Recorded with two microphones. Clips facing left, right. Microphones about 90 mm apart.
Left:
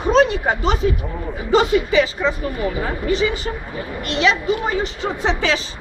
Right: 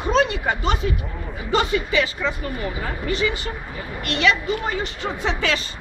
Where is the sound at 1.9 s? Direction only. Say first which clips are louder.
Left 5 dB; 30° left (ahead or behind).